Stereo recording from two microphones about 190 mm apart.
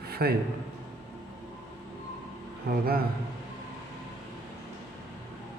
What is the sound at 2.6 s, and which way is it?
Speech, 50° right (ahead or behind).